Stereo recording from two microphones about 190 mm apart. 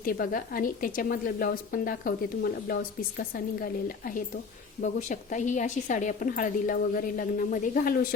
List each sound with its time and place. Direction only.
0.0 s a woman's voice: 50° left (ahead or behind)